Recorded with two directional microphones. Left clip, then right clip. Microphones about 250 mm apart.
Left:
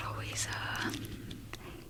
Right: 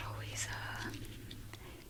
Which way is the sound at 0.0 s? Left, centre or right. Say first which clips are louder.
Left 5 dB; centre.